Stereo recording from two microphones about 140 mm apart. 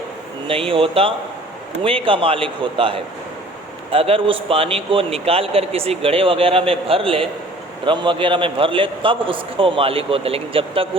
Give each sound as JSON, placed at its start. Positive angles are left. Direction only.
{"t": 0.4, "sound": "a man's voice", "side_deg": -40}